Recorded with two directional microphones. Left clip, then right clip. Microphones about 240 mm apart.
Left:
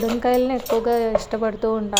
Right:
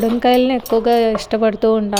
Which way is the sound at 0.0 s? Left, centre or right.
Right.